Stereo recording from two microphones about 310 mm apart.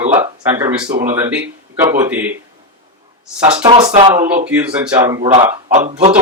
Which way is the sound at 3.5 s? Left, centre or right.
Centre.